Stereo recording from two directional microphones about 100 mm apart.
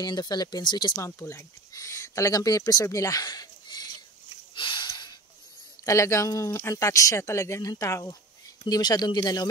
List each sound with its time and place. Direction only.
0.0 s speech: 45° left (ahead or behind)
0.9 s speech: 30° left (ahead or behind)
4.6 s a sound: 55° left (ahead or behind)
5.9 s speech: 30° left (ahead or behind)